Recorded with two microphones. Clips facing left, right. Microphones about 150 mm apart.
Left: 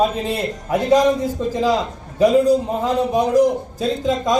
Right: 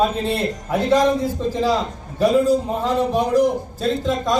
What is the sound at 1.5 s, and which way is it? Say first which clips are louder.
Speech: left 2 dB; 15° left (ahead or behind).